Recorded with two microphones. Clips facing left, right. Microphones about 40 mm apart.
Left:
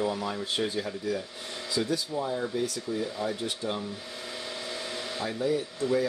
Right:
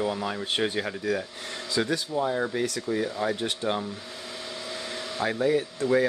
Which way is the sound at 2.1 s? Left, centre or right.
Right.